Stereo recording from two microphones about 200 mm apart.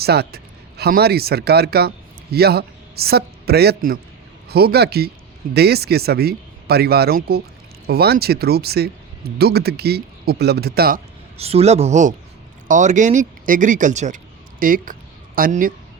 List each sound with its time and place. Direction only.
0.0 s a man's voice: 50° right (ahead or behind)
11.3 s speech: 30° right (ahead or behind); by 15.7 s 45° right (ahead or behind)